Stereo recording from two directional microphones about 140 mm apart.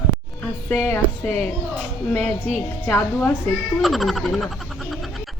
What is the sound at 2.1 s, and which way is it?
Speech, 55° right (ahead or behind).